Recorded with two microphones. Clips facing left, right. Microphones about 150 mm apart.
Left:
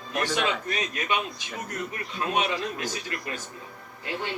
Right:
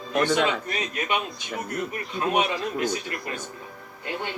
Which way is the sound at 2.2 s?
25° right (ahead or behind).